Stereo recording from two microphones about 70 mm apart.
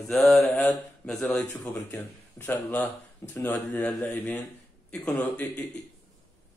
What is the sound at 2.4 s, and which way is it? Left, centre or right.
Speech, left.